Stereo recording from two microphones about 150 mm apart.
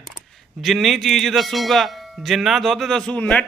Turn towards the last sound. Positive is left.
turn(degrees=10)  # may be behind; listen again after turning